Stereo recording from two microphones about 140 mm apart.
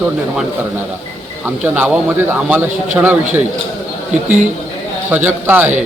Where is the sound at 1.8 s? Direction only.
15° right (ahead or behind).